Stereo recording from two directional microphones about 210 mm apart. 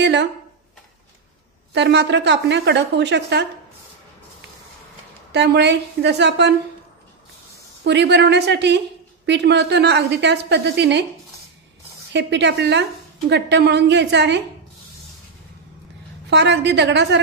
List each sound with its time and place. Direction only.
0.0 s speech: 55° right (ahead or behind)
1.7 s a woman's voice: 55° right (ahead or behind)
5.3 s a woman's voice: 55° right (ahead or behind)
7.8 s a woman's voice: 55° right (ahead or behind)
12.1 s a woman's voice: 55° right (ahead or behind)
16.3 s a woman's voice: 55° right (ahead or behind)